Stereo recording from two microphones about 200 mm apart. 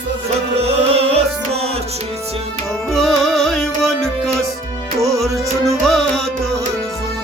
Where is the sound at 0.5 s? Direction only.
30° right (ahead or behind).